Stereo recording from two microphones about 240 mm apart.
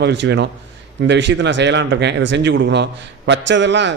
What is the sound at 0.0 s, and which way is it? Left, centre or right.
Speech, right.